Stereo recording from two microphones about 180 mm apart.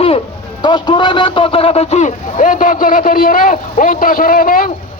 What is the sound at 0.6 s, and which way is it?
A man's voice, 25° left (ahead or behind).